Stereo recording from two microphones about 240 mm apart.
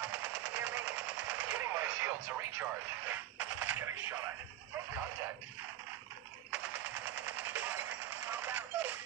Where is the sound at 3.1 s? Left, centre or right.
Centre.